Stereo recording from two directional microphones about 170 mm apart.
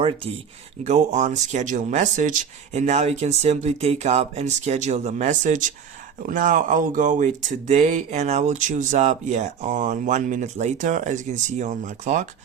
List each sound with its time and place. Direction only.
0.0 s speech: 35° right (ahead or behind)
0.9 s speech: 45° right (ahead or behind)